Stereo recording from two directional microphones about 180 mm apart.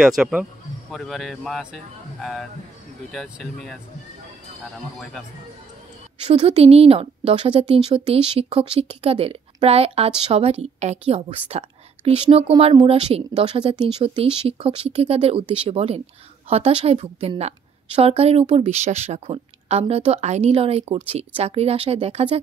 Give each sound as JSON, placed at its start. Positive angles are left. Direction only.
{"t": 0.0, "sound": "speech", "side_deg": -5}
{"t": 3.1, "sound": "speech", "side_deg": 0}
{"t": 6.2, "sound": "speech", "side_deg": -35}